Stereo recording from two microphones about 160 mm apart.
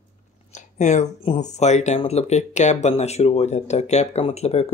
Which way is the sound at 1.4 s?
45° left (ahead or behind).